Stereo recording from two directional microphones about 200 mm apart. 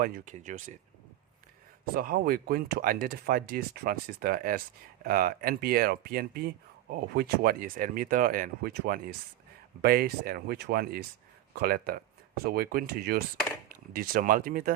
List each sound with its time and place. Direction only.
0.0 s speech: 45° right (ahead or behind)
1.8 s speech: 45° right (ahead or behind)